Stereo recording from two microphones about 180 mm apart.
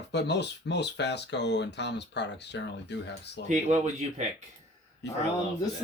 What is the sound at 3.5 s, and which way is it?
Speech, 40° right (ahead or behind).